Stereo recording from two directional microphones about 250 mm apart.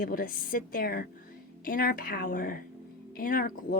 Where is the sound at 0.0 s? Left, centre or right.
Left.